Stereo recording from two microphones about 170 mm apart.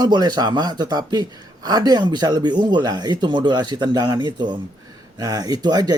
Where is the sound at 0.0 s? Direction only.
25° right (ahead or behind).